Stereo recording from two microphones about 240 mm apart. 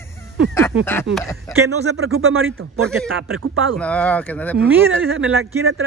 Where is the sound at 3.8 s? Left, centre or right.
Centre.